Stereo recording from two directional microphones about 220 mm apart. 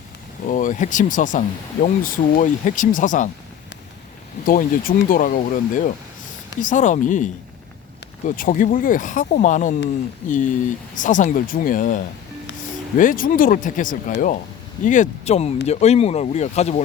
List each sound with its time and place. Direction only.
0.4 s speech: 35° left (ahead or behind)
4.4 s speech: 40° left (ahead or behind)
8.4 s speech: 35° left (ahead or behind)